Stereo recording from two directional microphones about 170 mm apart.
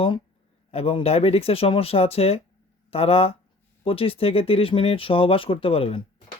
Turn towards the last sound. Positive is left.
turn(degrees=35)  # may be behind; listen again after turning